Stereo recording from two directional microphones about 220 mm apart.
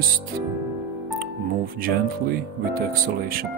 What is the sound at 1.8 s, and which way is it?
Speech, 40° right (ahead or behind).